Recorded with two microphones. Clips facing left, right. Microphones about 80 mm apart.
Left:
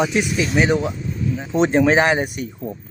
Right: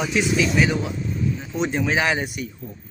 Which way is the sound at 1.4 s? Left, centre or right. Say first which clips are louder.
Left 7 dB; left.